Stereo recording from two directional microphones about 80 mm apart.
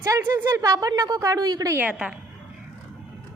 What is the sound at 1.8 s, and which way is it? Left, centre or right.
Speech, centre.